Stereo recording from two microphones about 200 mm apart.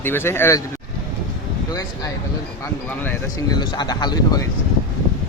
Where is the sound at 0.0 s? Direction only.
10° left (ahead or behind).